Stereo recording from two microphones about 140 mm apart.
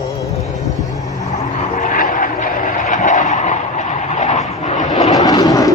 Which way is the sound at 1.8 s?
75° left (ahead or behind).